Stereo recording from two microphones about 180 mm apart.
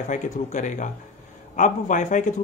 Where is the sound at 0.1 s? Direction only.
45° left (ahead or behind).